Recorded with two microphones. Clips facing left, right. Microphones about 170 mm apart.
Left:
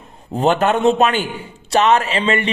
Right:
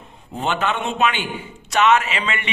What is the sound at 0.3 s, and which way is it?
A man's voice, 40° left (ahead or behind).